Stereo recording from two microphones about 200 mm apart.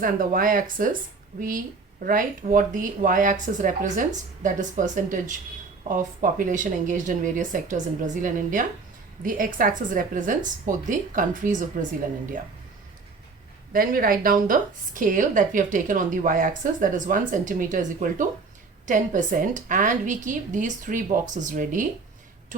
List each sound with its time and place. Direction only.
0.0 s speech: 45° right (ahead or behind)
2.0 s a woman's voice: 45° right (ahead or behind)
13.7 s a woman's voice: 45° right (ahead or behind)